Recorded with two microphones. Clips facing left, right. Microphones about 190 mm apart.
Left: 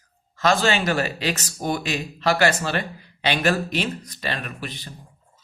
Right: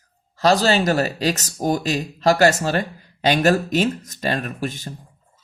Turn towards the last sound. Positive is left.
turn(degrees=-45)  # may be behind; listen again after turning